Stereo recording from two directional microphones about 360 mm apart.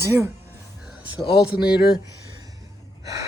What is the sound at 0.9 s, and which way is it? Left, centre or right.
Speech, centre.